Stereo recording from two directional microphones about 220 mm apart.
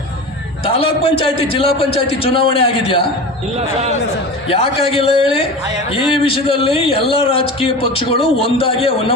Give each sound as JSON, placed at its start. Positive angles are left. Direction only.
{"t": 0.7, "sound": "a man's voice", "side_deg": 25}
{"t": 4.4, "sound": "a man's voice", "side_deg": 25}